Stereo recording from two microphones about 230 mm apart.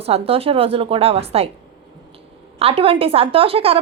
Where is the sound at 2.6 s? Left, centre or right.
Right.